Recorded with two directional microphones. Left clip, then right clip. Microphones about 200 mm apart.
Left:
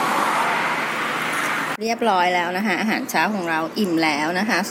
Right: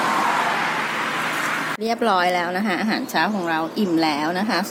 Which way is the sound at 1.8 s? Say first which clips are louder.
Even; centre (ahead or behind).